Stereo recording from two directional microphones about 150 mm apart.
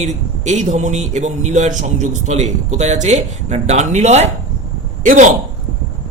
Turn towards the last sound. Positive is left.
turn(degrees=-60)  # may be behind; listen again after turning